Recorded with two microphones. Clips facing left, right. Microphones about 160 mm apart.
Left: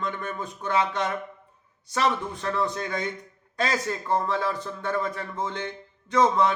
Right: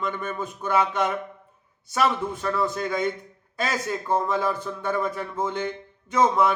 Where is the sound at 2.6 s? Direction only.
5° right (ahead or behind).